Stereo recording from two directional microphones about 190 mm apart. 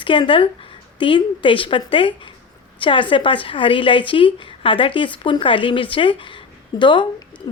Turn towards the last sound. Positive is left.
turn(degrees=25)  # may be behind; listen again after turning